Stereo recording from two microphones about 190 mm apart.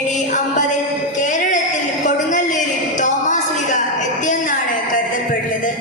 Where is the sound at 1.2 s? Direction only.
40° left (ahead or behind).